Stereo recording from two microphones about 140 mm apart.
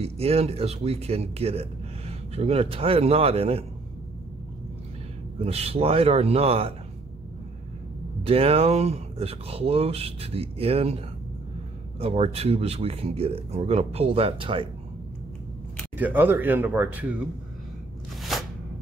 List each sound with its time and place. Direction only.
0.0 s a man's voice: 45° right (ahead or behind)
5.4 s a man's voice: 45° right (ahead or behind)
8.3 s a man's voice: 45° right (ahead or behind)
12.0 s a man's voice: 45° right (ahead or behind)
16.0 s speech: 15° right (ahead or behind)